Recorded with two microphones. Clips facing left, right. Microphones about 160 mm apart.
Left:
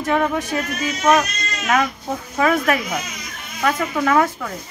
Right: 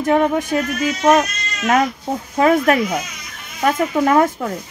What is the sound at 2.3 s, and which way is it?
Speech, 35° right (ahead or behind).